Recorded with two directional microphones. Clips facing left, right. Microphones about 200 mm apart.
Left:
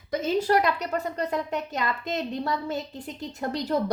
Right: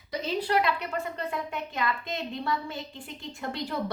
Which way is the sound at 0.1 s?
50° left (ahead or behind).